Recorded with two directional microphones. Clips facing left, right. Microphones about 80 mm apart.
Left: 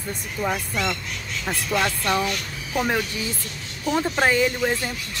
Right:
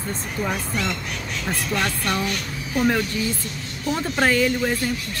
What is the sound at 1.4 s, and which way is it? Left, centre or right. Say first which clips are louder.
Speech: left 1 dB; centre.